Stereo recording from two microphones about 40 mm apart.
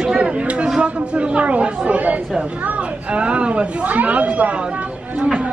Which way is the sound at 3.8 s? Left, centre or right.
Right.